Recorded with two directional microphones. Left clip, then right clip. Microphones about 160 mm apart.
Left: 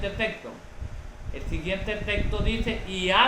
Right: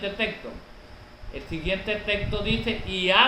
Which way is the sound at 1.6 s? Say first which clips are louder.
Right 3 dB; 15° right (ahead or behind).